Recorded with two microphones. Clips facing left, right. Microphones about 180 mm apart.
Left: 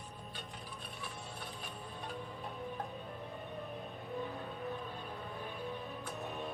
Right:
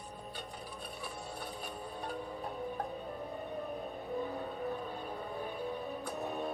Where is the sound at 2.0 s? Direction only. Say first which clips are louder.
Right 4 dB; 40° right (ahead or behind).